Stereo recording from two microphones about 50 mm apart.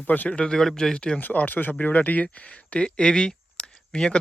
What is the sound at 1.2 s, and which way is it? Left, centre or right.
Speech, left.